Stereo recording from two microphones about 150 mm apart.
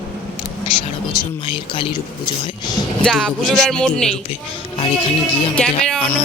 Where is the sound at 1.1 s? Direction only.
35° left (ahead or behind).